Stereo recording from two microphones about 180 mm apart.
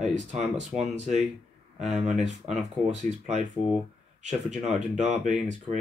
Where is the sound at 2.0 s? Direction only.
40° right (ahead or behind).